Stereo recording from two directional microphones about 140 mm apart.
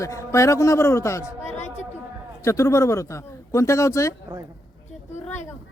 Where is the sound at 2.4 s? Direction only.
20° left (ahead or behind).